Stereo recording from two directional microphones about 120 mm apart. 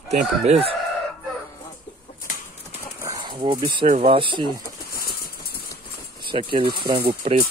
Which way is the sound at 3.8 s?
90° right.